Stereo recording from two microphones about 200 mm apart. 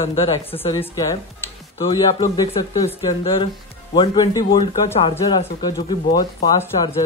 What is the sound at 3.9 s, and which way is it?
Speech, 25° left (ahead or behind).